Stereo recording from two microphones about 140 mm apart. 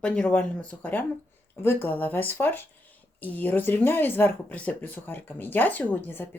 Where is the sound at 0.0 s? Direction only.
5° left (ahead or behind).